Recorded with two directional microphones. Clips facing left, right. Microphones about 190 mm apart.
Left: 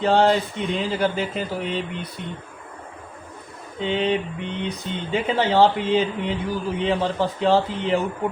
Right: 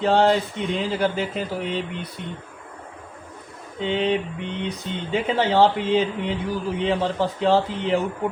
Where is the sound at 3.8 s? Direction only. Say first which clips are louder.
Even; 60° right (ahead or behind).